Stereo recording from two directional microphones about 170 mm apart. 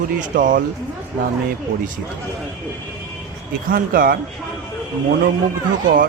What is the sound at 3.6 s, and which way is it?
Speech, 55° right (ahead or behind).